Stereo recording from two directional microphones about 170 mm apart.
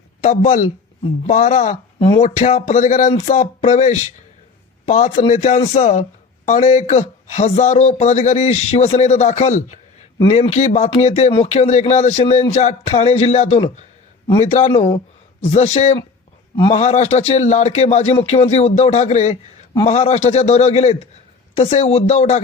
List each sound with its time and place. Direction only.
0.2 s a man's voice: 45° left (ahead or behind)
2.0 s a man's voice: 35° left (ahead or behind)